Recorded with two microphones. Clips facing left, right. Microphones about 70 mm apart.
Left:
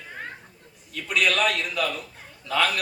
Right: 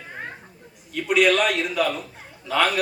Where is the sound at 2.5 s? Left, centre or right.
Right.